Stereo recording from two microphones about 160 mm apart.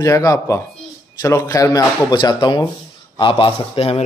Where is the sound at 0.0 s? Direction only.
20° left (ahead or behind).